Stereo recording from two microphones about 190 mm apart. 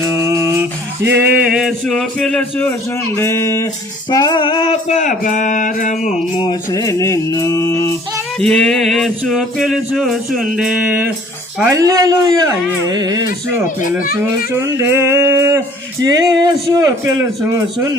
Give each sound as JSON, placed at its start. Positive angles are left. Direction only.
{"t": 0.3, "sound": "a sound", "side_deg": -15}
{"t": 3.2, "sound": "mantra", "side_deg": 15}
{"t": 4.1, "sound": "music", "side_deg": 20}
{"t": 6.3, "sound": "mantra", "side_deg": 25}
{"t": 8.4, "sound": "music", "side_deg": 5}
{"t": 11.6, "sound": "speech", "side_deg": -15}
{"t": 13.8, "sound": "a child's voice", "side_deg": 45}
{"t": 14.5, "sound": "a sound", "side_deg": -10}
{"t": 16.0, "sound": "speech", "side_deg": -20}